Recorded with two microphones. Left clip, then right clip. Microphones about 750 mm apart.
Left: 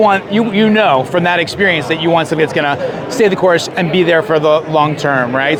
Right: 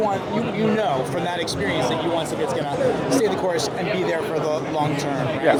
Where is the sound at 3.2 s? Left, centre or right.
Left.